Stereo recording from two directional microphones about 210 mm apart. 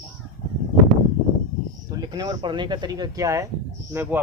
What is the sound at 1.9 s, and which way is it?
Speech, 15° right (ahead or behind).